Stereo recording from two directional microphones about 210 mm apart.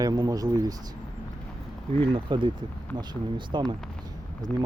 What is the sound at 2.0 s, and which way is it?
Speech, 20° right (ahead or behind).